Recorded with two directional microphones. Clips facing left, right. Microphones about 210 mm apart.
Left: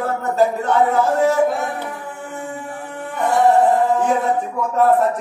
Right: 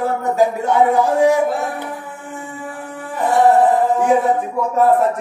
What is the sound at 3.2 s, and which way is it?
Music, centre (ahead or behind).